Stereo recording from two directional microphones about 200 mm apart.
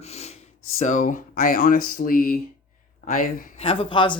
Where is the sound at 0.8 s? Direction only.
40° left (ahead or behind).